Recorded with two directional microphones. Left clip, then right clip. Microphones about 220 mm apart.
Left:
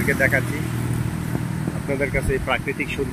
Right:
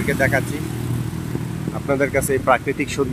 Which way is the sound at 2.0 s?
20° right (ahead or behind).